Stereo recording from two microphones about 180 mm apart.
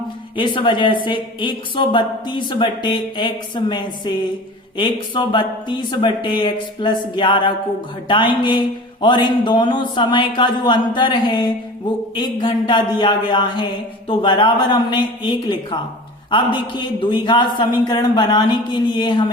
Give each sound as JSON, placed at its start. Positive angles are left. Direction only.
{"t": 0.3, "sound": "speech", "side_deg": 25}